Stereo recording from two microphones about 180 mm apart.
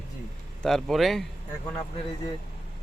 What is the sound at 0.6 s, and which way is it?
Speech, centre (ahead or behind).